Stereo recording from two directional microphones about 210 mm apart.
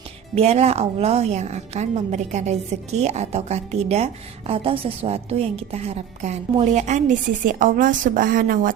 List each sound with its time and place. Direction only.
0.3 s a woman's voice: 30° right (ahead or behind)